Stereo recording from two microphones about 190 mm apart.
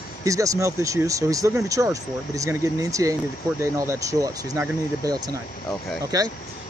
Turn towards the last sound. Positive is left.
turn(degrees=-20)  # may be behind; listen again after turning